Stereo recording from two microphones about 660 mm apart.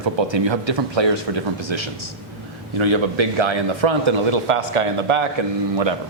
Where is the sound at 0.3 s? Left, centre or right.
Right.